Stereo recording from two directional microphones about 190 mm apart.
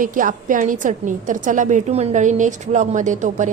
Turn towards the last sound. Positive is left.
turn(degrees=-40)  # may be behind; listen again after turning